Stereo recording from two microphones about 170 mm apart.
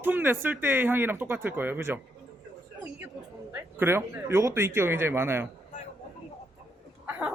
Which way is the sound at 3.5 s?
15° right (ahead or behind).